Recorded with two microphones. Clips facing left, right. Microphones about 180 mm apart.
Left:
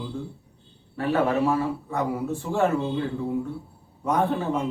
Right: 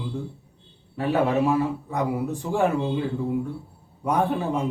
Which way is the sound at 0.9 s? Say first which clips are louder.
Right 1 dB; 15° right (ahead or behind).